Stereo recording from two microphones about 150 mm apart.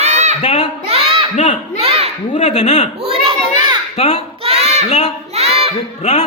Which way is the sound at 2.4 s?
50° left (ahead or behind).